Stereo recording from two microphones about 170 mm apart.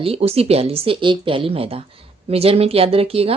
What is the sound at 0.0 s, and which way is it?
A woman's voice, 35° right (ahead or behind).